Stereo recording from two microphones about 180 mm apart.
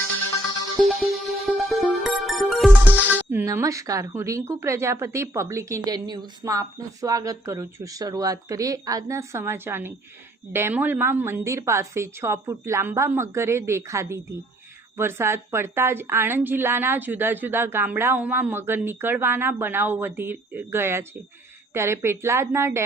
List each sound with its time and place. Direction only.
0.8 s music: centre (ahead or behind)
2.9 s speech: 10° right (ahead or behind)